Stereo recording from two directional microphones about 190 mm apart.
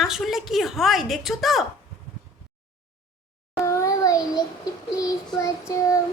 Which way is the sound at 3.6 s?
15° left (ahead or behind).